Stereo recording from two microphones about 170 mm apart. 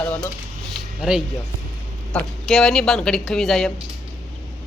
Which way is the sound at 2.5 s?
Centre (ahead or behind).